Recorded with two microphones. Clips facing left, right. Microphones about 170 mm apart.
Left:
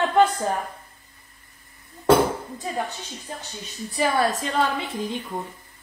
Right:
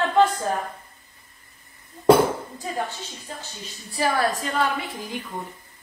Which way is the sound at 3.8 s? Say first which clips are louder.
Left 1 dB; 20° left (ahead or behind).